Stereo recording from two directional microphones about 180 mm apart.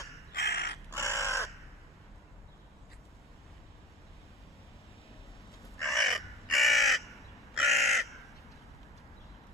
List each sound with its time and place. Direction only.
0.3 s crow: 60° left (ahead or behind)
0.9 s crow: 15° left (ahead or behind)
5.8 s crow: centre (ahead or behind)